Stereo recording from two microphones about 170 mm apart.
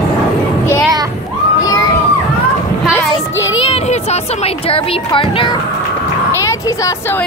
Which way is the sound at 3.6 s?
40° left (ahead or behind).